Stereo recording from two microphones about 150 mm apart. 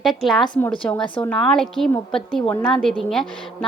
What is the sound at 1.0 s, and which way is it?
Speech, 35° left (ahead or behind).